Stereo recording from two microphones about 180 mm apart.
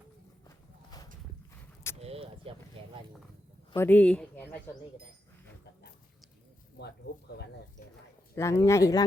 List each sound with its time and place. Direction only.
0.4 s walk: 20° left (ahead or behind)
2.0 s a sound: 35° right (ahead or behind)
3.8 s speech: 10° left (ahead or behind)
6.7 s speech: 70° left (ahead or behind)
8.4 s speech: 15° left (ahead or behind)